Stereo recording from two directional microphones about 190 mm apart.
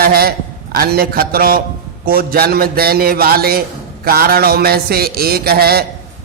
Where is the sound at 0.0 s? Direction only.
50° right (ahead or behind).